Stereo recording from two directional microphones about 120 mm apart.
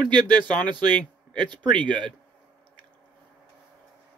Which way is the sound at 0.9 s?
10° left (ahead or behind).